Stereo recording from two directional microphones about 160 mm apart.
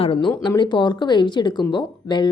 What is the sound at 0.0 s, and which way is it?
A woman's voice, 30° left (ahead or behind).